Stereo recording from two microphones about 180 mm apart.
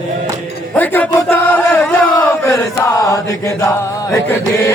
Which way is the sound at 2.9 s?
20° left (ahead or behind).